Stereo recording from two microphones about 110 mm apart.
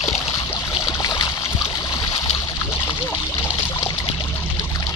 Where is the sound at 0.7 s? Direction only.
35° left (ahead or behind).